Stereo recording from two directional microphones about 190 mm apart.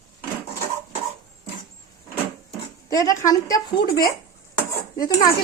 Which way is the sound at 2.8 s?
15° left (ahead or behind).